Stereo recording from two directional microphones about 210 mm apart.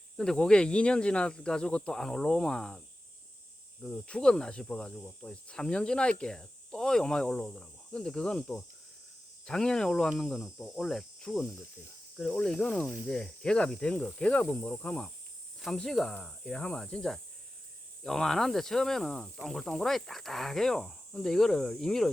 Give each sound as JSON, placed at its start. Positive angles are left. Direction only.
{"t": 0.2, "sound": "speech", "side_deg": 5}